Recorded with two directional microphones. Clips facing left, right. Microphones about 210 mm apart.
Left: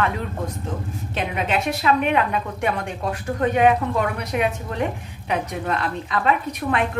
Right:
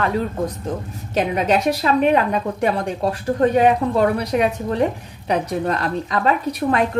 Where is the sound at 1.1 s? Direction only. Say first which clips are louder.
Right 6 dB; 40° right (ahead or behind).